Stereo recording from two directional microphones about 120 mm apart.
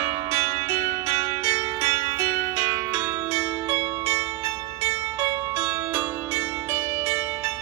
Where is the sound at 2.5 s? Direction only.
25° right (ahead or behind).